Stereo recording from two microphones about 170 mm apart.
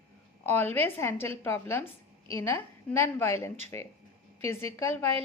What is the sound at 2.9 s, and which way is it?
A woman's voice, 15° left (ahead or behind).